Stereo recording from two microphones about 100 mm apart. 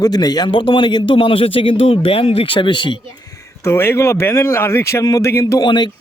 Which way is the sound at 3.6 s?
25° left (ahead or behind).